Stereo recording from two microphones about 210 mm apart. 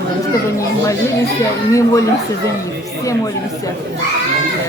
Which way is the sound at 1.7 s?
15° left (ahead or behind).